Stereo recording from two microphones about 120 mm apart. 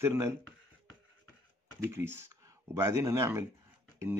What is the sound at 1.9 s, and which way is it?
Speech, 20° right (ahead or behind).